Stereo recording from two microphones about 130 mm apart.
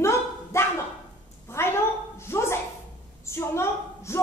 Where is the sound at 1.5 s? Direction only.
20° left (ahead or behind).